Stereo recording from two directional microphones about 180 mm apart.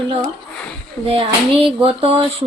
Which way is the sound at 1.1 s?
30° right (ahead or behind).